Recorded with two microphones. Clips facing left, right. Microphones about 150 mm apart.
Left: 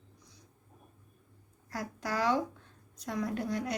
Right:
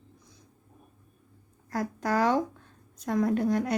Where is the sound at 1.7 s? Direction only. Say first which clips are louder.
Right 7 dB; 50° right (ahead or behind).